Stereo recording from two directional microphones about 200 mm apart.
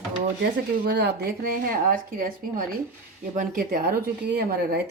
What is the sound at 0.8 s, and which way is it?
Speech, 55° right (ahead or behind).